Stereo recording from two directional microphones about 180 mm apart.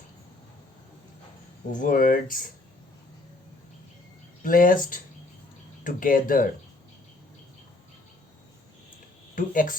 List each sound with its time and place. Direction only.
1.7 s speech: 45° left (ahead or behind)
4.4 s speech: 50° left (ahead or behind)
9.3 s speech: 50° left (ahead or behind)